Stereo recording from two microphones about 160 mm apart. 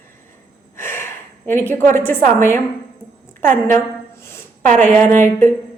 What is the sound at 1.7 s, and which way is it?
Speech, 15° left (ahead or behind).